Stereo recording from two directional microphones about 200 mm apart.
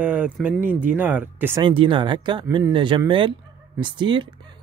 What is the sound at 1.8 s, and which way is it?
Speech, 25° right (ahead or behind).